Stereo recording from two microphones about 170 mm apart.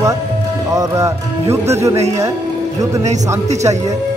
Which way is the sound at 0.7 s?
20° right (ahead or behind).